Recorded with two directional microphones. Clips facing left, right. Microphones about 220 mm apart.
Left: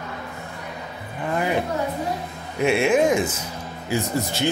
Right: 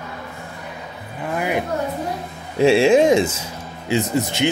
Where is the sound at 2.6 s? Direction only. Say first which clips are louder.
Right 5 dB; 30° right (ahead or behind).